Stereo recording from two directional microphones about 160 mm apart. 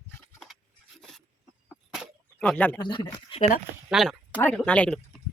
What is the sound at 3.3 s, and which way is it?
Speech, 50° left (ahead or behind).